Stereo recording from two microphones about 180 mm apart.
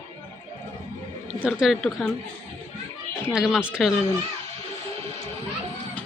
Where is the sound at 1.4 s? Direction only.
5° right (ahead or behind).